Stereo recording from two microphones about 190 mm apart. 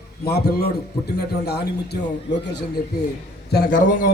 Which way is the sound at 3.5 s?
50° left (ahead or behind).